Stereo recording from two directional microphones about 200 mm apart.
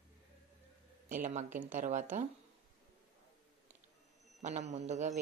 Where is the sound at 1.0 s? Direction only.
40° right (ahead or behind).